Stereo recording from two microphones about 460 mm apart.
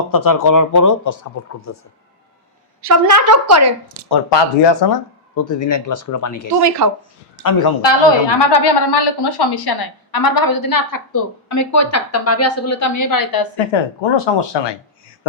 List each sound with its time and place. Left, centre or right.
0.1 s a man's voice: left
2.8 s a woman's voice: right
4.1 s speech: left
5.3 s a man's voice: left
6.6 s a woman's voice: right
7.8 s a woman's voice: left
14.0 s speech: left